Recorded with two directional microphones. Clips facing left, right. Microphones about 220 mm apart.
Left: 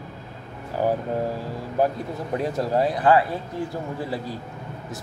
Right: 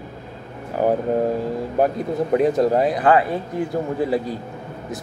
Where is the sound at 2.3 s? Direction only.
20° right (ahead or behind).